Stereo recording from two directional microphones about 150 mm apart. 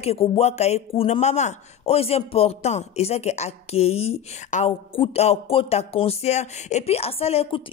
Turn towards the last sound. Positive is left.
turn(degrees=40)  # may be behind; listen again after turning